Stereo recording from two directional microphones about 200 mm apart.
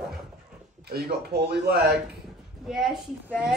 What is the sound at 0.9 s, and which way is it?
Speech, 55° right (ahead or behind).